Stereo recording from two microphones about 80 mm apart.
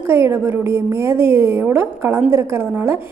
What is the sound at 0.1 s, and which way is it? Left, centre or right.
A woman's voice, right.